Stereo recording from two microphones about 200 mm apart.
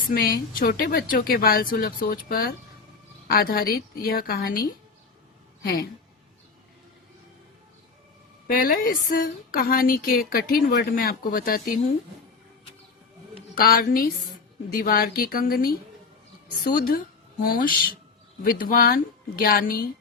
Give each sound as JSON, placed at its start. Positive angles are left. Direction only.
{"t": 0.1, "sound": "speech", "side_deg": 45}
{"t": 8.4, "sound": "speech", "side_deg": 45}
{"t": 13.6, "sound": "speech", "side_deg": 45}
{"t": 16.7, "sound": "speech", "side_deg": 45}